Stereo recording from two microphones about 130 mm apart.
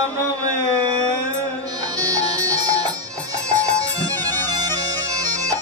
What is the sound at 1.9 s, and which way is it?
Music, 30° right (ahead or behind).